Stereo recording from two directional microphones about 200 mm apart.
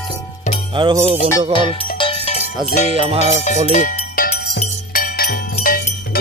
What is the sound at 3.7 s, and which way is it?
Music, 35° left (ahead or behind).